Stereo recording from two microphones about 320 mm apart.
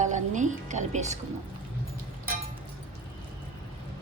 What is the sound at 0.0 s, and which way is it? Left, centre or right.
A woman's voice, right.